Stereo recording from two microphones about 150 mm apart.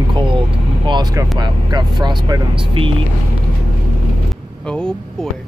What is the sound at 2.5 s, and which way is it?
Speech, 35° right (ahead or behind).